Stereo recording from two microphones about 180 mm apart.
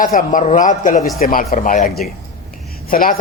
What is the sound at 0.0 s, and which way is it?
Speech, 45° left (ahead or behind).